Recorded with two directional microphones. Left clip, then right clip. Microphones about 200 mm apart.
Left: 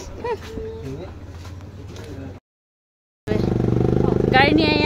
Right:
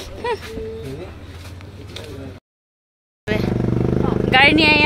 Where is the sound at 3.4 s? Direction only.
45° left (ahead or behind).